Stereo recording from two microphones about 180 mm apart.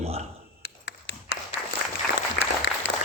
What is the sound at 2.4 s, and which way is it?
Applause, 65° left (ahead or behind).